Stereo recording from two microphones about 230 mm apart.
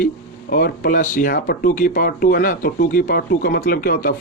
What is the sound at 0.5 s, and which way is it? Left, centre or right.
Speech, left.